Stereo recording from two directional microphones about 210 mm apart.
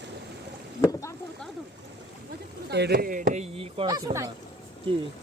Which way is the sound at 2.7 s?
50° right (ahead or behind).